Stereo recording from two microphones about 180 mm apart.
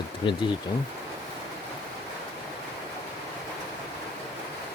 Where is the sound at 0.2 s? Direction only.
25° left (ahead or behind).